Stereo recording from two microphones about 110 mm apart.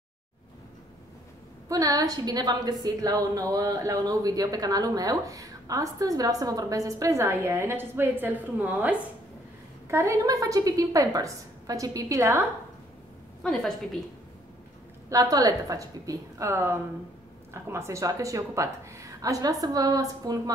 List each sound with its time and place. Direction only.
1.7 s a woman's voice: 35° right (ahead or behind); by 8.9 s 15° right (ahead or behind)
9.8 s a woman's voice: 25° right (ahead or behind)
13.4 s a woman's voice: 5° left (ahead or behind)
15.0 s a woman's voice: 35° right (ahead or behind)